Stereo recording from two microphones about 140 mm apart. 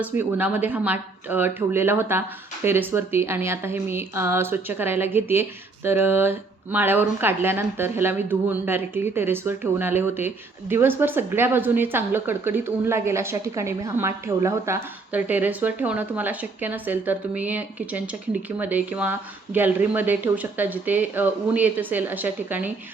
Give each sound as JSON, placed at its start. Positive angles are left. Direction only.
{"t": 0.0, "sound": "a woman's voice", "side_deg": -10}